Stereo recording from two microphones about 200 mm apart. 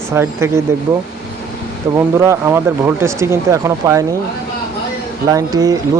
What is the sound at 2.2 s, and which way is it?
Speech, 15° right (ahead or behind).